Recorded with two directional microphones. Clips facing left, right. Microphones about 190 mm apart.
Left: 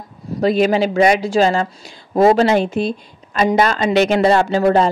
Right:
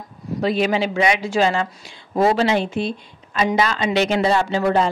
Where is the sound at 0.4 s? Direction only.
45° left (ahead or behind).